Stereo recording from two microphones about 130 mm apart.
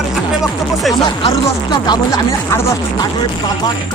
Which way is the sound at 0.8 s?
Centre (ahead or behind).